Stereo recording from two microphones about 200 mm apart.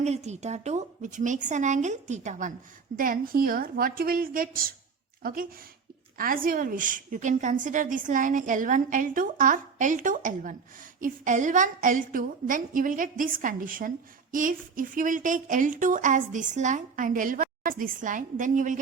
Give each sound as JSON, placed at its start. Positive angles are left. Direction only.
{"t": 0.0, "sound": "a woman's voice", "side_deg": -35}